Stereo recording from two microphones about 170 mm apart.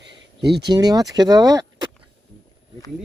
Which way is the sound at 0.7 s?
20° right (ahead or behind).